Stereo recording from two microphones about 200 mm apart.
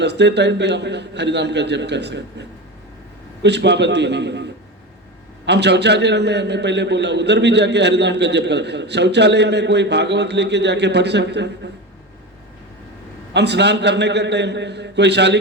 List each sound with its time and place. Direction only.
0.0 s a man's voice: 60° right (ahead or behind)
5.5 s a man's voice: 60° right (ahead or behind)
13.3 s a man's voice: 60° right (ahead or behind)